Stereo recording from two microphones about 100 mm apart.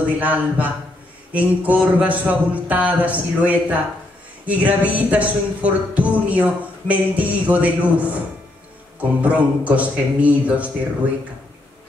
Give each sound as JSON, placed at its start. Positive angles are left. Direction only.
{"t": 0.0, "sound": "speech", "side_deg": -15}
{"t": 9.2, "sound": "speech", "side_deg": -15}